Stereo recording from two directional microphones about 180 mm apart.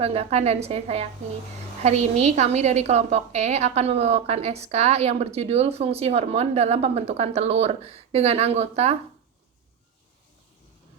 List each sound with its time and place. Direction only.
0.0 s a woman's voice: 35° right (ahead or behind)